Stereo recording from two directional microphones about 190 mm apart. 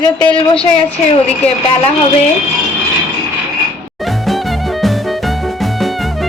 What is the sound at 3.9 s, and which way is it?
Music, centre (ahead or behind).